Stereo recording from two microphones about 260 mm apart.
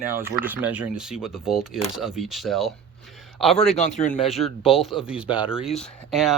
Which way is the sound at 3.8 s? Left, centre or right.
Left.